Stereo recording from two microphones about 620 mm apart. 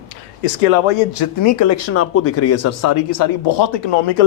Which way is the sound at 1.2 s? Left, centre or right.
Left.